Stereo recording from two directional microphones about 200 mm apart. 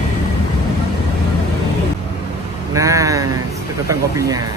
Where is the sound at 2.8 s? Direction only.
15° right (ahead or behind).